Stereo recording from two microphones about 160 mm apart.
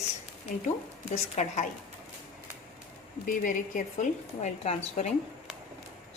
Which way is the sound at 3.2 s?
60° left (ahead or behind).